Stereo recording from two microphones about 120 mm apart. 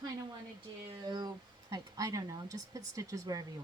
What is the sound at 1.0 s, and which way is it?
Speech, 35° right (ahead or behind).